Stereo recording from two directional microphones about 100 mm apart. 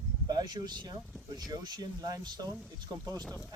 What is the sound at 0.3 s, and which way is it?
Speech, 45° right (ahead or behind).